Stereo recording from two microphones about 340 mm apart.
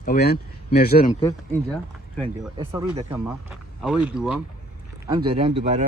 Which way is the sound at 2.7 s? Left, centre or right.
Centre.